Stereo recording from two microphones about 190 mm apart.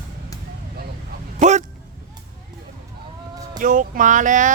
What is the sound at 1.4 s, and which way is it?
Speech, 40° right (ahead or behind).